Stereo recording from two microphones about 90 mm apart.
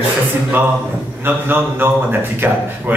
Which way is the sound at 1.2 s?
25° right (ahead or behind).